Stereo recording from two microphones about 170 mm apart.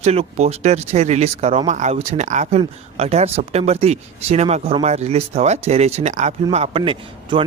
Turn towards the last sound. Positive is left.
turn(degrees=-30)  # may be behind; listen again after turning